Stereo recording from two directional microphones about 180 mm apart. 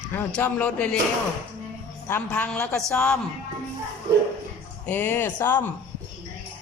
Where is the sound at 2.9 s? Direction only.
5° left (ahead or behind).